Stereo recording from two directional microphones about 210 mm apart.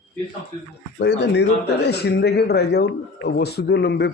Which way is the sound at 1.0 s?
55° left (ahead or behind).